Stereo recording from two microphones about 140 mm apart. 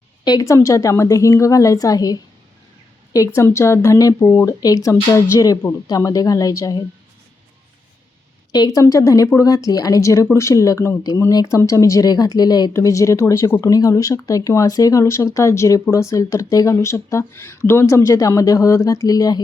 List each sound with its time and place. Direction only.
0.3 s speech: 25° left (ahead or behind)
8.5 s speech: 25° left (ahead or behind)